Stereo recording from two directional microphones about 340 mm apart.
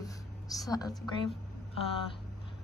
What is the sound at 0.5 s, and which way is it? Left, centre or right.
Speech, centre.